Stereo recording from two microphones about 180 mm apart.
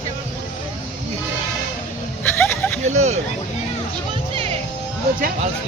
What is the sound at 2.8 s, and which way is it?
Speech, 40° right (ahead or behind).